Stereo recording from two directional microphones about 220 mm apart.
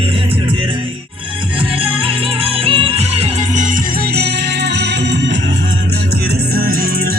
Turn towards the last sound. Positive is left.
turn(degrees=-45)  # may be behind; listen again after turning